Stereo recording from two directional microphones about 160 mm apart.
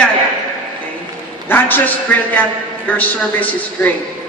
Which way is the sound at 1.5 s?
10° left (ahead or behind).